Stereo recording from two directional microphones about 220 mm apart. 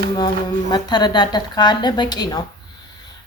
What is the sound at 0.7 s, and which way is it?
A woman's voice, 20° left (ahead or behind).